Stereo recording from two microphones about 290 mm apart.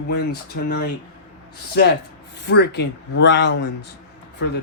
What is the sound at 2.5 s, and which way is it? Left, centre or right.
Speech, left.